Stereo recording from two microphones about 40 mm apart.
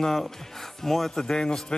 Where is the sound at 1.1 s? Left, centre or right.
Centre.